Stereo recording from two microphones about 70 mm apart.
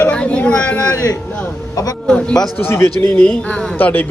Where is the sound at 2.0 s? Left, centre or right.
Centre.